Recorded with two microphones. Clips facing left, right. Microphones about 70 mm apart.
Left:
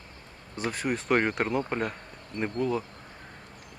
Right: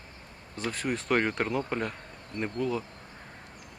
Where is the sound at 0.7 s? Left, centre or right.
Centre.